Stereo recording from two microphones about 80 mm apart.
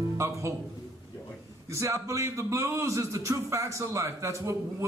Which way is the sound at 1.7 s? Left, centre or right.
Right.